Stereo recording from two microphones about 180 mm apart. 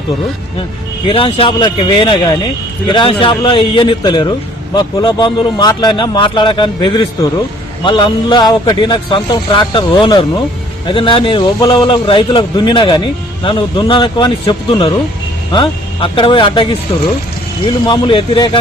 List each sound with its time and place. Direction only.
1.0 s a man's voice: 30° left (ahead or behind)